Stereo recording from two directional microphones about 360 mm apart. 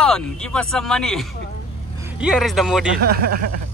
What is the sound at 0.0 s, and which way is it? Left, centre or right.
Speech, centre.